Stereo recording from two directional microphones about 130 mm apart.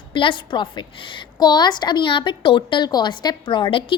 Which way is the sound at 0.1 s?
40° left (ahead or behind).